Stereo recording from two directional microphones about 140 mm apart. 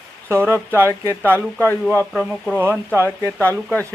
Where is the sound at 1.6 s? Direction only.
15° left (ahead or behind).